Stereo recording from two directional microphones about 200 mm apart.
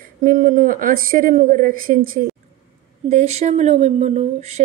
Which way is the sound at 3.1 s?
35° right (ahead or behind).